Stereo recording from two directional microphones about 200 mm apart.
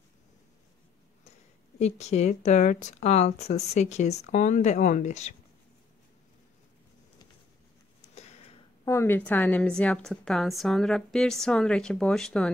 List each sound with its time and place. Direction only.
1.8 s speech: 35° left (ahead or behind)
8.0 s a sound: 30° left (ahead or behind)
8.8 s a woman's voice: 10° left (ahead or behind)